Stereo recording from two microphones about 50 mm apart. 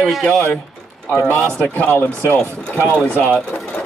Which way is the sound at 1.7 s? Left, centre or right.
Left.